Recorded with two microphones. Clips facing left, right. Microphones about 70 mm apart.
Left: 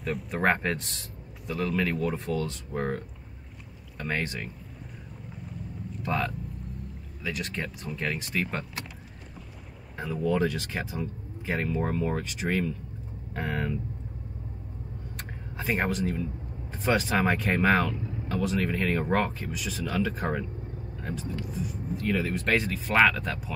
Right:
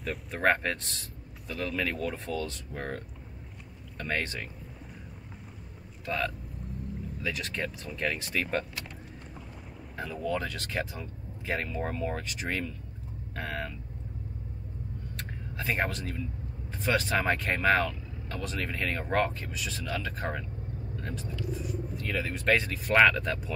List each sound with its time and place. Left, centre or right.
0.0 s speech: centre
4.0 s speech: centre
6.0 s vehicle: centre
7.2 s speech: centre
9.9 s speech: centre
15.5 s speech: centre
21.5 s speech: centre